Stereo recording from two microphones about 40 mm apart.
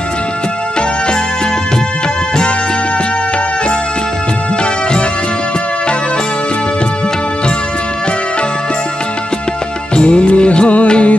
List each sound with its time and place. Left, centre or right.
9.9 s music: left